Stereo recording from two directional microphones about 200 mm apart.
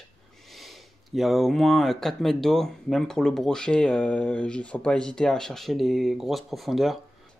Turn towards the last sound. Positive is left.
turn(degrees=0)  # may be behind; listen again after turning